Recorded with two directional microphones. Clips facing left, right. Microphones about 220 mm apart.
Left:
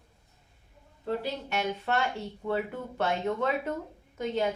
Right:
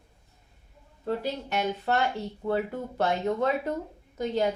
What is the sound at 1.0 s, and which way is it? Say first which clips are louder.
Speech: right 2 dB; 40° right (ahead or behind).